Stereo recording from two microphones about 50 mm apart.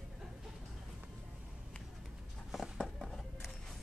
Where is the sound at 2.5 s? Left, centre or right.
Centre.